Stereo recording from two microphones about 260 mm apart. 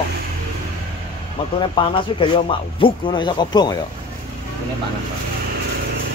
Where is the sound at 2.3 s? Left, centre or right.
Centre.